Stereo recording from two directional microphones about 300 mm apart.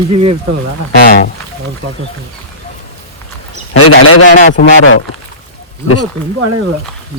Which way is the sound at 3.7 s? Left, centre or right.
Left.